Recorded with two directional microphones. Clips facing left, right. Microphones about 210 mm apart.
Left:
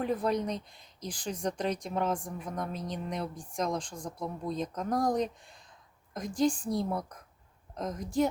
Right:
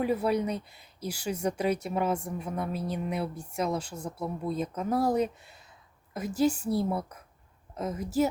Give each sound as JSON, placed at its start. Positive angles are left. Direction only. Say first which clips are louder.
{"t": 0.0, "sound": "speech", "louder": "right 3 dB", "side_deg": -10}